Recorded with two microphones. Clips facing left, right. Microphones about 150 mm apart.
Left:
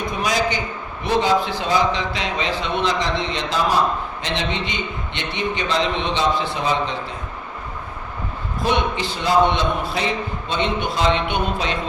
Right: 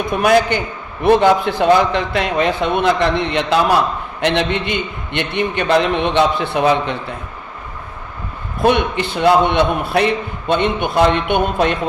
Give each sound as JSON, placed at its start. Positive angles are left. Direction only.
{"t": 0.1, "sound": "a man's voice", "side_deg": -60}
{"t": 8.6, "sound": "a man's voice", "side_deg": -60}